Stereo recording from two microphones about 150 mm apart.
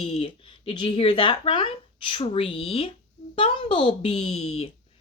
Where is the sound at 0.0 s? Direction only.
40° left (ahead or behind).